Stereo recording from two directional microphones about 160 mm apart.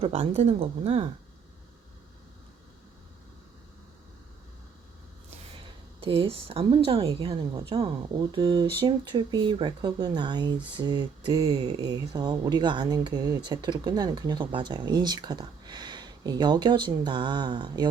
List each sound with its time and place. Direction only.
0.0 s a woman's voice: 40° right (ahead or behind)
6.0 s a woman's voice: 35° right (ahead or behind)